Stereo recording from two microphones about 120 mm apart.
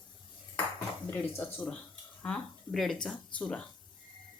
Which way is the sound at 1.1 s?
10° left (ahead or behind).